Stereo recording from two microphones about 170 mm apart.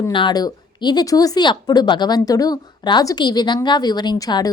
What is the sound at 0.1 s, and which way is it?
Speech, 25° left (ahead or behind).